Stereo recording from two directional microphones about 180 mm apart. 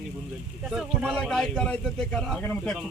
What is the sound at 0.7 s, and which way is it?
A man's voice, centre (ahead or behind).